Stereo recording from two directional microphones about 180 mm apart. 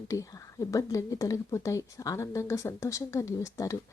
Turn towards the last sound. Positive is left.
turn(degrees=15)  # may be behind; listen again after turning